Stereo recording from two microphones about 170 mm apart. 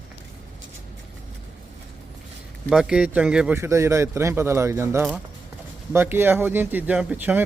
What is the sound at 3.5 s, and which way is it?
Speech, 15° right (ahead or behind).